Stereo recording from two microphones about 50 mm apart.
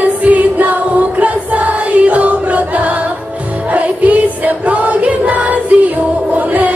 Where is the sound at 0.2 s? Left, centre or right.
Right.